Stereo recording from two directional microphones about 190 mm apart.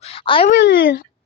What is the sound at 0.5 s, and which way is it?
Speech, 75° left (ahead or behind).